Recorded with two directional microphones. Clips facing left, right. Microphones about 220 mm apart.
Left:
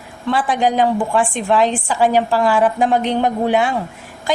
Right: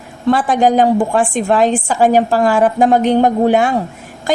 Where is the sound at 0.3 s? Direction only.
45° right (ahead or behind).